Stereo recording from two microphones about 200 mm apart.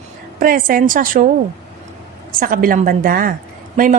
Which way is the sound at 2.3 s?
45° right (ahead or behind).